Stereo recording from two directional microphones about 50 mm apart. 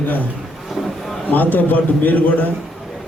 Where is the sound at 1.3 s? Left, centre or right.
Left.